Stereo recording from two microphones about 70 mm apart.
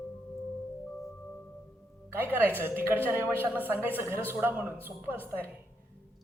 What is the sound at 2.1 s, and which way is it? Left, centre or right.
A woman's voice, right.